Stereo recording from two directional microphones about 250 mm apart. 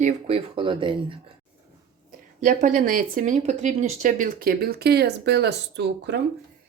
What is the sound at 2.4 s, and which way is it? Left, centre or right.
Speech, right.